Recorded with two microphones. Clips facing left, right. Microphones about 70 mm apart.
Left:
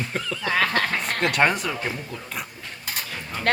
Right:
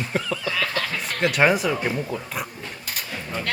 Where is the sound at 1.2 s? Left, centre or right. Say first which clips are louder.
Right 3 dB; centre.